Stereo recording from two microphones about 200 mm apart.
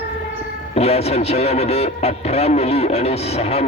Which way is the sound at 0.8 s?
30° left (ahead or behind).